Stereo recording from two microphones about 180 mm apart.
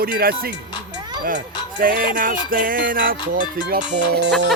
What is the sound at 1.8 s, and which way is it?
Music, 50° right (ahead or behind).